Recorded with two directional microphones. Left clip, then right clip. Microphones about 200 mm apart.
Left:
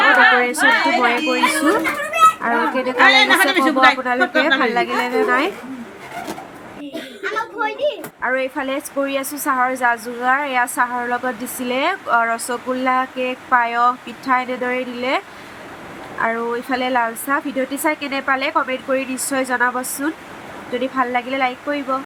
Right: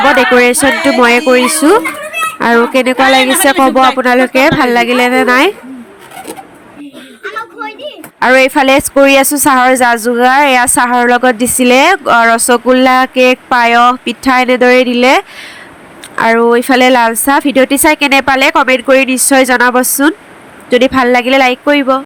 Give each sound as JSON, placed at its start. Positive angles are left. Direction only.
{"t": 0.3, "sound": "speech", "side_deg": -40}
{"t": 3.0, "sound": "speech", "side_deg": -15}
{"t": 4.0, "sound": "speech", "side_deg": -40}
{"t": 8.2, "sound": "speech", "side_deg": -50}
{"t": 16.2, "sound": "speech", "side_deg": -45}